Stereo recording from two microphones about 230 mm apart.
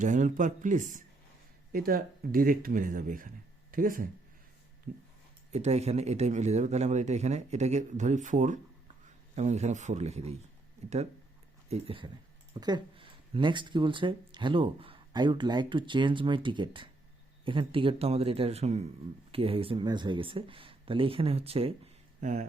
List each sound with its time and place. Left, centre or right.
0.0 s speech: right
5.5 s speech: right